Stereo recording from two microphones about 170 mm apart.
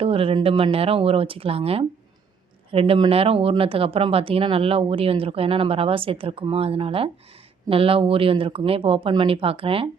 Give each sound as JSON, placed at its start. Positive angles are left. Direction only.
{"t": 0.0, "sound": "speech", "side_deg": -35}